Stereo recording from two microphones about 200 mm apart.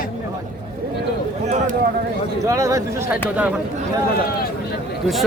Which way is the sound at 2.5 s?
15° right (ahead or behind).